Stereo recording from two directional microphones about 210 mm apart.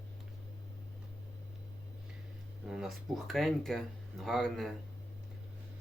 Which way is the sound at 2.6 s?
Centre (ahead or behind).